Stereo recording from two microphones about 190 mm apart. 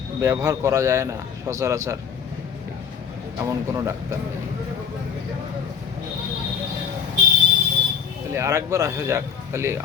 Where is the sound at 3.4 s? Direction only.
15° right (ahead or behind).